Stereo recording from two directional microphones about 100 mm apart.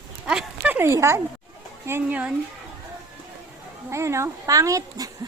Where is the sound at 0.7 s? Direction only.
25° right (ahead or behind).